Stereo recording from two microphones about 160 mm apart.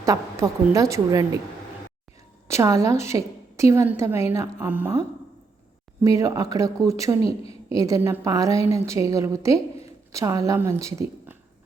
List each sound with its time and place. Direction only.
0.0 s a woman's voice: 20° right (ahead or behind)
2.5 s a woman's voice: 20° right (ahead or behind)
6.0 s a woman's voice: 20° right (ahead or behind)
7.3 s a woman's voice: 35° left (ahead or behind)
7.8 s a woman's voice: 20° right (ahead or behind)